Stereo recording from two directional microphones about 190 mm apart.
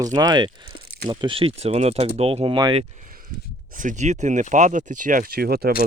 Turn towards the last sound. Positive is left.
turn(degrees=-55)  # may be behind; listen again after turning